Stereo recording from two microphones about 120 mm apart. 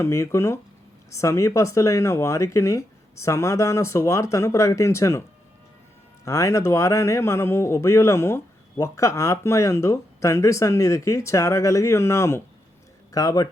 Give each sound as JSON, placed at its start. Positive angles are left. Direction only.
{"t": 0.0, "sound": "speech", "side_deg": 25}
{"t": 6.2, "sound": "speech", "side_deg": 25}